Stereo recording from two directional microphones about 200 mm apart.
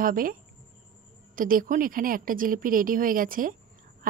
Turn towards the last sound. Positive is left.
turn(degrees=-45)  # may be behind; listen again after turning